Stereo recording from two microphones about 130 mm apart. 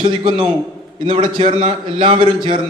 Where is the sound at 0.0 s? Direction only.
40° right (ahead or behind).